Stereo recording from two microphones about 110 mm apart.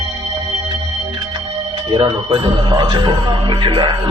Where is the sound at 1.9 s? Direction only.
45° right (ahead or behind).